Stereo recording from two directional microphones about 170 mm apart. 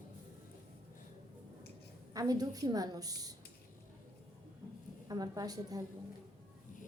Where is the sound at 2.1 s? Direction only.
20° right (ahead or behind).